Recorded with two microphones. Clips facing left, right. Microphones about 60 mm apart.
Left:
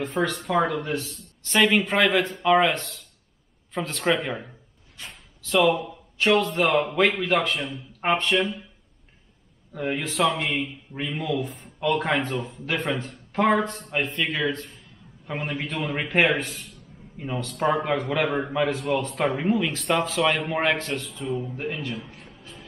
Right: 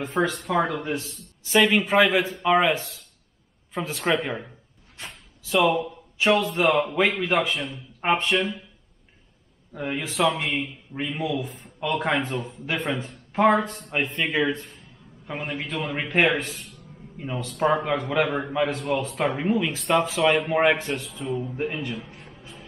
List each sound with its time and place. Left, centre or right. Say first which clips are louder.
0.0 s a man's voice: right 1 dB; centre
0.7 s speech: left 1 dB; centre
1.0 s a man's voice: left 1 dB; centre
5.0 s a sound: right 1 dB; centre
6.1 s a man's voice: even; centre
9.7 s a man's voice: left 2 dB; centre
14.6 s a man's voice: left 2 dB; centre
21.5 s speech: right 2 dB; centre
21.9 s music: even; centre